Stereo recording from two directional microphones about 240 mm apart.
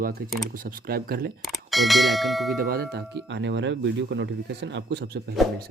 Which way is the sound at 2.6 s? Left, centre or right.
Right.